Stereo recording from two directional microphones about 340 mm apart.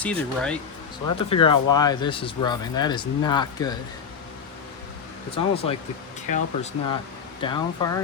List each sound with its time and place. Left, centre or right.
0.0 s speech: centre
1.0 s speech: centre
5.3 s speech: centre